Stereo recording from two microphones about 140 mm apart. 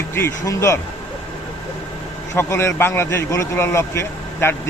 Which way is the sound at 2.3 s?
20° left (ahead or behind).